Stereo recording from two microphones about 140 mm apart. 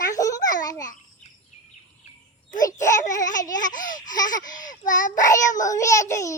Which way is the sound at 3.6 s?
70° left (ahead or behind).